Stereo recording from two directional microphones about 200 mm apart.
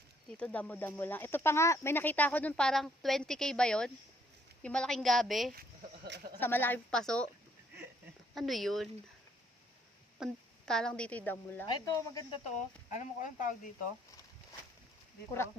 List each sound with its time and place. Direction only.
0.3 s a woman's voice: 5° left (ahead or behind)
6.1 s speech: 55° right (ahead or behind)
6.4 s speech: 10° left (ahead or behind)
8.4 s a woman's voice: centre (ahead or behind)
10.2 s a woman's voice: 5° right (ahead or behind)
11.7 s speech: 20° left (ahead or behind)
12.5 s speech: 35° left (ahead or behind)